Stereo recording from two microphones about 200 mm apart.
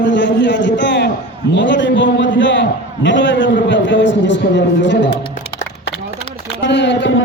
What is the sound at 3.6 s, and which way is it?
A man's voice, 65° left (ahead or behind).